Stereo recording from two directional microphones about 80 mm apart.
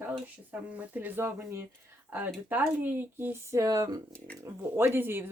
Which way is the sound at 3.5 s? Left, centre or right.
Right.